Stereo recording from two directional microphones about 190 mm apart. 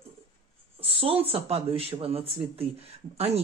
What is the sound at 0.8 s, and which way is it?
A woman's voice, 30° right (ahead or behind).